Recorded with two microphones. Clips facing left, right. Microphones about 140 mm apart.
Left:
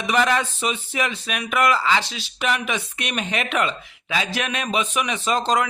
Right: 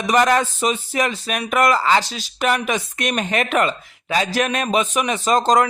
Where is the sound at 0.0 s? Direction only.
40° right (ahead or behind).